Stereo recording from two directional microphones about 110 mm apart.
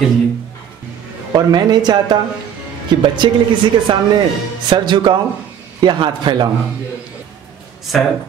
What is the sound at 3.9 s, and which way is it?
A man's voice, 45° right (ahead or behind).